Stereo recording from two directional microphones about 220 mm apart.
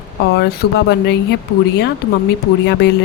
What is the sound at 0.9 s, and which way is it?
Speech, 50° left (ahead or behind).